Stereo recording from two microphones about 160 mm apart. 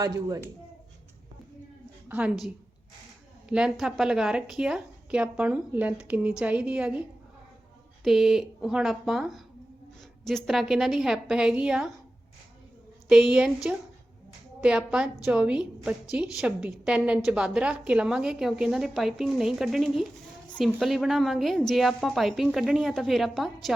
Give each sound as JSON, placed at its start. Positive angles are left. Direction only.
{"t": 0.0, "sound": "speech", "side_deg": -20}
{"t": 2.0, "sound": "a woman's voice", "side_deg": -10}
{"t": 3.5, "sound": "a woman's voice", "side_deg": -5}
{"t": 8.0, "sound": "a woman's voice", "side_deg": 0}
{"t": 13.1, "sound": "a woman's voice", "side_deg": -5}